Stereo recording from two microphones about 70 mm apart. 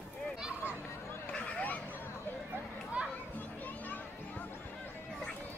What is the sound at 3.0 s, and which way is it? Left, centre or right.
Children playing, centre.